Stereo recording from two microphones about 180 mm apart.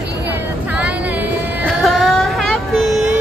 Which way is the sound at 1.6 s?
Centre (ahead or behind).